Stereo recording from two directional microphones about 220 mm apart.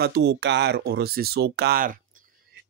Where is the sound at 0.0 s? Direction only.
50° right (ahead or behind).